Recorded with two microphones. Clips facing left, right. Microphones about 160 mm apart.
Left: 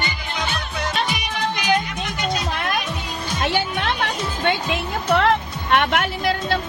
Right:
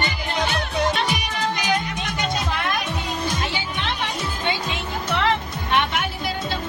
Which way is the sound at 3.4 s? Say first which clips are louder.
Left 5 dB; 60° left (ahead or behind).